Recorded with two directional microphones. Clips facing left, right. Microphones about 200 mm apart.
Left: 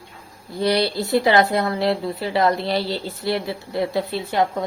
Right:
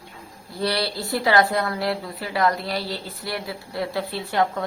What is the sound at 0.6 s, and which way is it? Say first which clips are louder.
Speech: left 5 dB; 20° left (ahead or behind).